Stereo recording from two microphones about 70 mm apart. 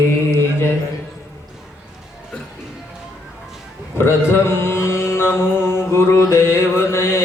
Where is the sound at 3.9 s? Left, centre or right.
Left.